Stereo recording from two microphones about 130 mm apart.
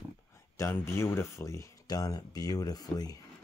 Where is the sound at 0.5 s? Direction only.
20° left (ahead or behind).